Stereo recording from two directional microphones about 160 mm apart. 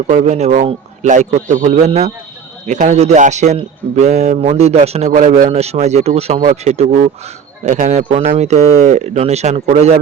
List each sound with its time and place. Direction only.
0.1 s a man's voice: 45° right (ahead or behind)
5.5 s a man's voice: 40° right (ahead or behind)